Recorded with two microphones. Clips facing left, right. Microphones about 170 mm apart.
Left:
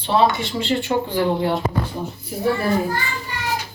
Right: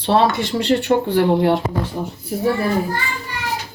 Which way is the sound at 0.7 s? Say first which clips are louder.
Right 5 dB; 75° right (ahead or behind).